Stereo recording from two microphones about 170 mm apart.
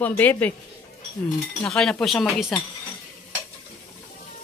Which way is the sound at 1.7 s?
5° left (ahead or behind).